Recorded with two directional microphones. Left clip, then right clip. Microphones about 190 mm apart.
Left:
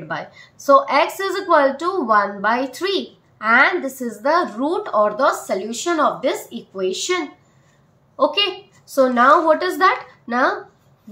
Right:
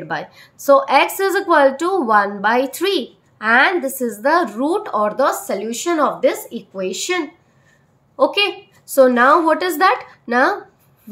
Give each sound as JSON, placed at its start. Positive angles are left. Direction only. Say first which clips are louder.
{"t": 0.1, "sound": "a woman's voice", "louder": "right 2 dB", "side_deg": -45}